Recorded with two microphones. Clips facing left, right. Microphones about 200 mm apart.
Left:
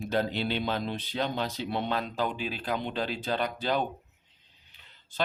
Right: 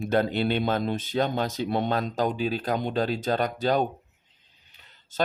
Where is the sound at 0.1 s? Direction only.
55° right (ahead or behind).